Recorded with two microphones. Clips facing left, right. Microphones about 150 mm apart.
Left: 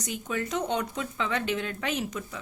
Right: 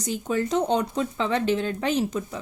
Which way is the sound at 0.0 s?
30° right (ahead or behind).